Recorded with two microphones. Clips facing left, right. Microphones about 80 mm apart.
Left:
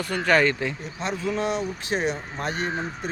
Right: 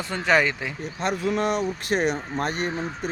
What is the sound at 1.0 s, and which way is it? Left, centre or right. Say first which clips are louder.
Speech: right 2 dB; right.